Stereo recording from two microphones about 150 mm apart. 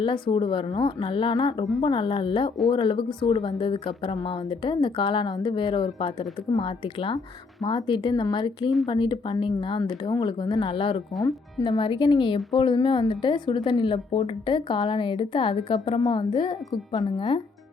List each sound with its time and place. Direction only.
0.0 s speech: 35° left (ahead or behind)
11.2 s speech: 25° left (ahead or behind)
16.0 s a woman's voice: 20° left (ahead or behind)
16.3 s speech: 35° left (ahead or behind)